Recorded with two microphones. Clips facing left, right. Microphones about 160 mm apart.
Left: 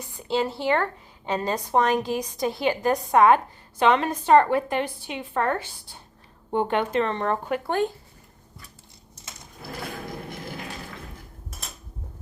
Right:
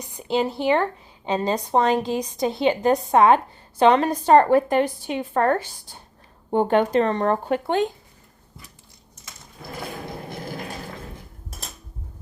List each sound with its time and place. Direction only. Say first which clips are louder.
0.0 s speech: right 2 dB; 20° right (ahead or behind)